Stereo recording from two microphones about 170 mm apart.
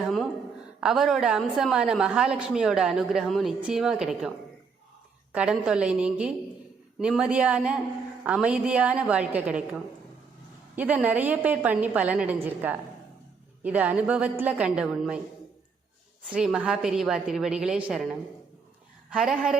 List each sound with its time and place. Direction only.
0.0 s a sound: centre (ahead or behind)
0.8 s a woman's voice: centre (ahead or behind)
5.3 s a woman's voice: 5° right (ahead or behind)
16.2 s a woman's voice: 5° right (ahead or behind)